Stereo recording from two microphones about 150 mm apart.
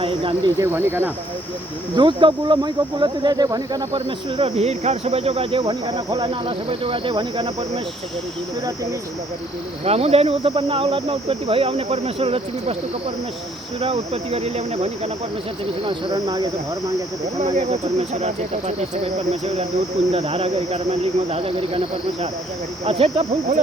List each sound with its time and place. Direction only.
0.0 s speech: 35° right (ahead or behind)
0.6 s speech: 15° right (ahead or behind)
2.0 s speech: 35° right (ahead or behind)
3.9 s speech: 40° right (ahead or behind)
5.6 s speech: 25° right (ahead or behind)
6.4 s speech: 40° right (ahead or behind)
9.8 s speech: 45° right (ahead or behind)
13.8 s speech: 45° right (ahead or behind)
15.8 s speech: 35° right (ahead or behind)
17.4 s speech: 50° right (ahead or behind)
22.9 s speech: 45° right (ahead or behind)